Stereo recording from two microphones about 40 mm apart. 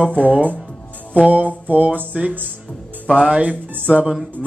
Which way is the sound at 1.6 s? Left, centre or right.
Right.